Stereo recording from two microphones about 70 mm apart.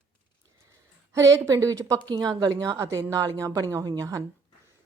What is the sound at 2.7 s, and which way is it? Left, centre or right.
Speech, right.